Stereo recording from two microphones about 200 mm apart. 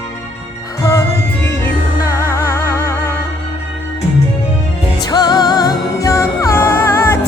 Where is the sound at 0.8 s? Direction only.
15° left (ahead or behind).